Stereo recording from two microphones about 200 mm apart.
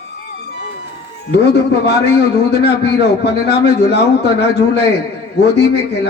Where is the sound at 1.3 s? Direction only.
55° left (ahead or behind).